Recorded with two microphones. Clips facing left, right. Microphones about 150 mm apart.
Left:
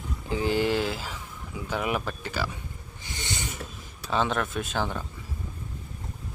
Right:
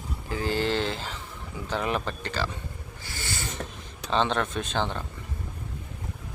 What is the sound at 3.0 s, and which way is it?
Snort, 20° left (ahead or behind).